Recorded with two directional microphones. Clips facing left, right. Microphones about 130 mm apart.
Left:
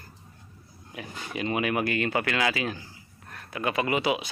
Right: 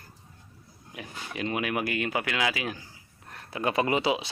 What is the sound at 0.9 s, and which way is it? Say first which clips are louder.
Speech: left 2 dB; centre (ahead or behind).